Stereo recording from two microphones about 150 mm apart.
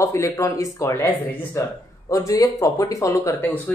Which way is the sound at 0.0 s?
20° left (ahead or behind).